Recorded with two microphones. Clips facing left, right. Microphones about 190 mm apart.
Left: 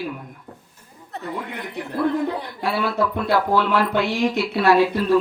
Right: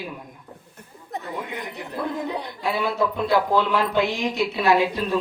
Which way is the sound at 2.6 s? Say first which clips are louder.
Left 1 dB; 20° right (ahead or behind).